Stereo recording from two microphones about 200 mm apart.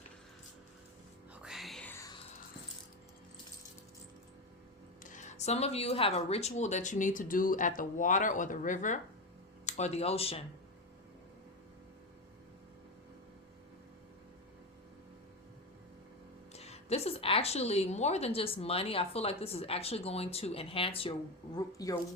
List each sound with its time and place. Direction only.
1.4 s whispering: centre (ahead or behind)
5.0 s speech: 40° left (ahead or behind)
16.5 s a woman's voice: 30° left (ahead or behind)
21.7 s speech: 15° left (ahead or behind)